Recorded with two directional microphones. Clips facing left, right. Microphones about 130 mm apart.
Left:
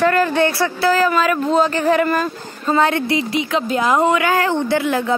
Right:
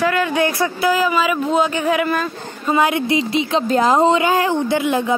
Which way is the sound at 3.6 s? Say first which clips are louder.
Right 3 dB; 35° right (ahead or behind).